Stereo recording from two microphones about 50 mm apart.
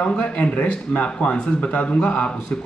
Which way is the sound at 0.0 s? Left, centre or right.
Left.